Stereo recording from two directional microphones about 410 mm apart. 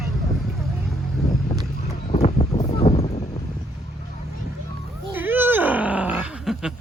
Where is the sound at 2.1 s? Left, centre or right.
Centre.